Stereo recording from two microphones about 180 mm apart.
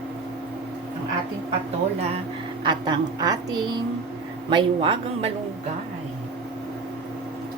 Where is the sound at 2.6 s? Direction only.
25° right (ahead or behind).